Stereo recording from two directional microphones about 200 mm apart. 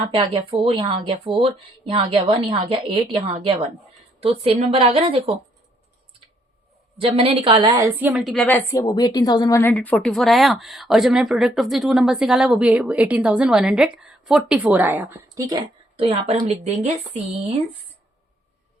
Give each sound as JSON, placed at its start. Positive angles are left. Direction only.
{"t": 0.0, "sound": "a woman's voice", "side_deg": -25}
{"t": 7.0, "sound": "a woman's voice", "side_deg": -30}
{"t": 15.4, "sound": "a woman's voice", "side_deg": -20}
{"t": 16.0, "sound": "a woman's voice", "side_deg": -30}